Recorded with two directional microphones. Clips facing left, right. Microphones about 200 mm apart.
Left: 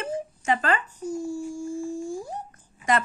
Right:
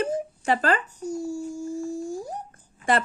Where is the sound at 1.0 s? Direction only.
10° right (ahead or behind).